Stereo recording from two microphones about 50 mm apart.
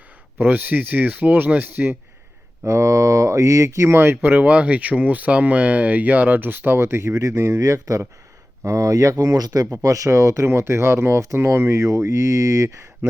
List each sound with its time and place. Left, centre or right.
0.3 s speech: right
2.6 s speech: right
3.9 s speech: right
6.7 s speech: right
11.3 s speech: right